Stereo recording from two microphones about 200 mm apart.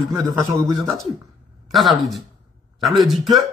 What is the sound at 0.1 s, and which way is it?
Speech, 15° right (ahead or behind).